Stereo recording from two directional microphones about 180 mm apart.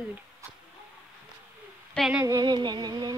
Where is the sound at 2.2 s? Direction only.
20° right (ahead or behind).